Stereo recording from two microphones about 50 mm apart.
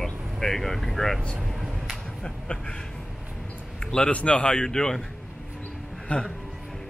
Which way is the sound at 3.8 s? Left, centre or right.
Centre.